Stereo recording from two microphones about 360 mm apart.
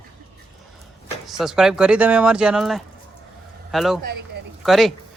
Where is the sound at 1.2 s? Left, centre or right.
Centre.